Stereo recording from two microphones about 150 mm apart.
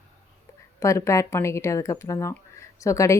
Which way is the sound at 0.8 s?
20° left (ahead or behind).